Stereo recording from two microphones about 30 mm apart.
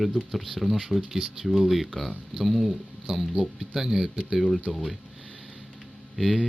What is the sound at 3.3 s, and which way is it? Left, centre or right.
Speech, centre.